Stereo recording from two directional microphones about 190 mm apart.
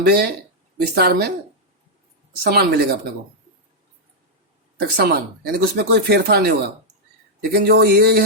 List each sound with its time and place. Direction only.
0.0 s a man's voice: 55° right (ahead or behind)
2.4 s a man's voice: 55° right (ahead or behind)
4.8 s a man's voice: 55° right (ahead or behind)